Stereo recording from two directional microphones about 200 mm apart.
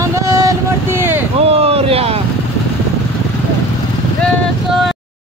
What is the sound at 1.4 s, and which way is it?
Speech, 30° right (ahead or behind).